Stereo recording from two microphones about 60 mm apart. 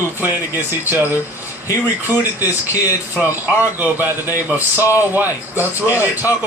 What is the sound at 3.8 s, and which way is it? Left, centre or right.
A man's voice, right.